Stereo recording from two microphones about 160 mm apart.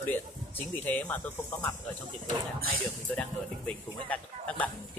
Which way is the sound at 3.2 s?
10° left (ahead or behind).